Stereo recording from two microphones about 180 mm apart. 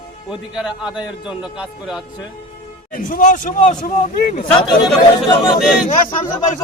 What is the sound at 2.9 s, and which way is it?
Speech, 50° left (ahead or behind).